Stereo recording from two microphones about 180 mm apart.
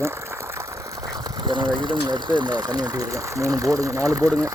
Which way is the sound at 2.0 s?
25° right (ahead or behind).